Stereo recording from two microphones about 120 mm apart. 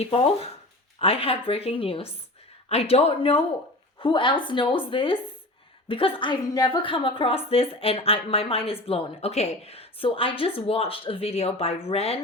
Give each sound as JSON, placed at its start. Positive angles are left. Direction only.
{"t": 0.9, "sound": "a woman's voice", "side_deg": 50}